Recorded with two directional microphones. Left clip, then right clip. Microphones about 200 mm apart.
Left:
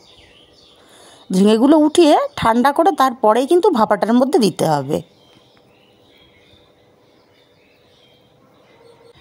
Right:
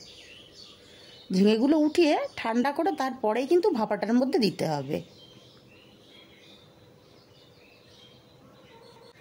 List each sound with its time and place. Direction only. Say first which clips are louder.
1.3 s speech: left 11 dB; 35° left (ahead or behind)